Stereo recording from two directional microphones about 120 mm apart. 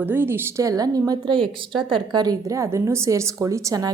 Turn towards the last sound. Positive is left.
turn(degrees=-30)  # may be behind; listen again after turning